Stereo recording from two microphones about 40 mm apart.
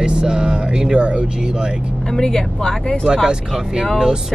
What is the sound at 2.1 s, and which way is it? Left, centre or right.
Speech, centre.